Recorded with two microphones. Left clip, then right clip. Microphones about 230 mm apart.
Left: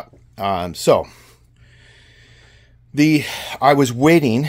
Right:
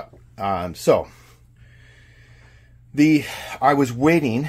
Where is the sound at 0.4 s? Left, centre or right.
Left.